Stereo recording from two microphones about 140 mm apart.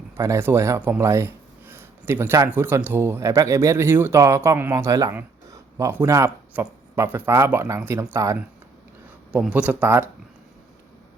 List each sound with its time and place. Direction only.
0.2 s speech: 20° right (ahead or behind)
9.3 s speech: 5° right (ahead or behind)